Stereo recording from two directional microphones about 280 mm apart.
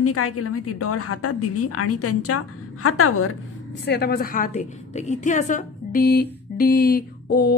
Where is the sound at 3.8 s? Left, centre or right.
Left.